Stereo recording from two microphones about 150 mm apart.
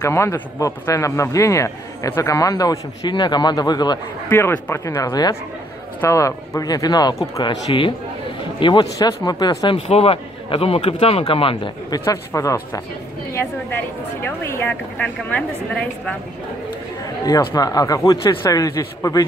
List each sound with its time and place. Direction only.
0.0 s a man's voice: 20° left (ahead or behind)
4.3 s a woman's voice: 15° left (ahead or behind)
9.8 s speech: 40° left (ahead or behind)
12.0 s a man's voice: 20° left (ahead or behind)
17.2 s a man's voice: 25° left (ahead or behind)